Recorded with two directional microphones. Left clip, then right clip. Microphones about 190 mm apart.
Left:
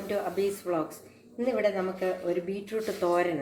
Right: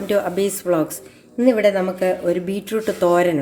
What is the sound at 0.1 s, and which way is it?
Speech, 55° right (ahead or behind).